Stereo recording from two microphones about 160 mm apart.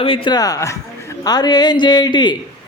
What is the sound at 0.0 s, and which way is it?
A woman's voice, 35° left (ahead or behind).